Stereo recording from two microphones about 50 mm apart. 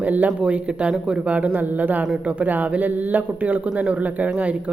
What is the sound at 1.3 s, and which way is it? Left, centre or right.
A man's voice, right.